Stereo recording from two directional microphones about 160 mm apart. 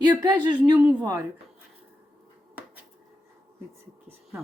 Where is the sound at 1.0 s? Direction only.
20° right (ahead or behind).